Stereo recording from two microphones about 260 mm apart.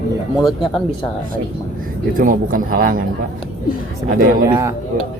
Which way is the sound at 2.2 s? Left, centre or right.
Right.